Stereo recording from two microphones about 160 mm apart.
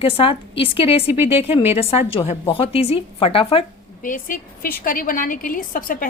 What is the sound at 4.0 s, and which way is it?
A woman's voice, 60° left (ahead or behind).